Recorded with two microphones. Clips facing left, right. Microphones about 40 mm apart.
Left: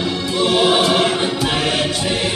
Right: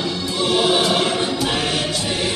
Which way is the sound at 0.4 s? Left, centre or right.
Left.